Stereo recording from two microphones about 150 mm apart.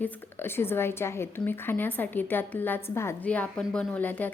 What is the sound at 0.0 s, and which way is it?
A woman's voice, 15° left (ahead or behind).